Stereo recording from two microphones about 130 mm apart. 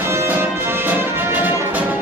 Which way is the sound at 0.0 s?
20° right (ahead or behind).